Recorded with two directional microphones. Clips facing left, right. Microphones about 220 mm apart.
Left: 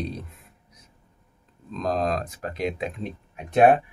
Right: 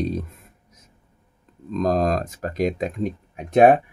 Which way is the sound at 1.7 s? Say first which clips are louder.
Right 5 dB; 45° right (ahead or behind).